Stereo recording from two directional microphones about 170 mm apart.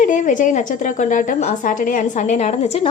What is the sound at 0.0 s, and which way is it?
A woman's voice, 50° left (ahead or behind).